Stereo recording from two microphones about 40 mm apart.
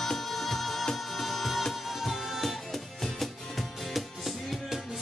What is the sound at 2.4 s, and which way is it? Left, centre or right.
Music, centre.